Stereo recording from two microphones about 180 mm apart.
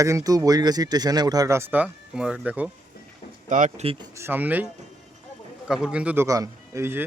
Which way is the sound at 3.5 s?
45° right (ahead or behind).